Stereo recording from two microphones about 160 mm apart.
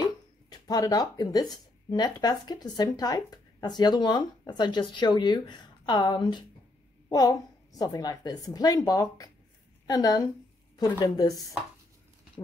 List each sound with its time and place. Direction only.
0.0 s a woman's voice: 25° left (ahead or behind)